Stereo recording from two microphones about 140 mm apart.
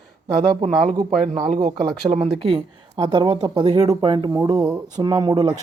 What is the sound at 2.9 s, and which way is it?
Speech, 30° right (ahead or behind).